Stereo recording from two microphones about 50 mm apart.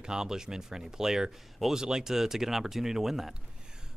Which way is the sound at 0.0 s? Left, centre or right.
Centre.